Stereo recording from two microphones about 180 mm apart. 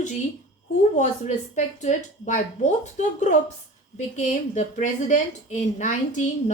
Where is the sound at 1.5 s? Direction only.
40° left (ahead or behind).